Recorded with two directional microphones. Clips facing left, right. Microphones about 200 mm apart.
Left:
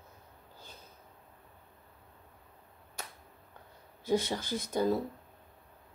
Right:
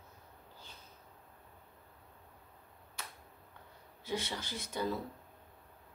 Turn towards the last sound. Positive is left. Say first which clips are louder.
# left 7 dB
turn(degrees=45)  # may be behind; listen again after turning